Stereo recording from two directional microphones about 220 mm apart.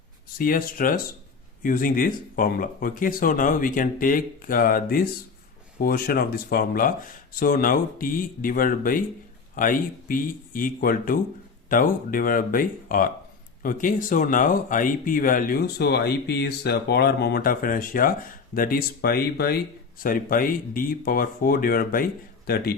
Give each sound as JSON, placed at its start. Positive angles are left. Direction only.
{"t": 0.3, "sound": "speech", "side_deg": 40}